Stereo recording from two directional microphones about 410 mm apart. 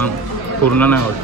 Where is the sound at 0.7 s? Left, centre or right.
Centre.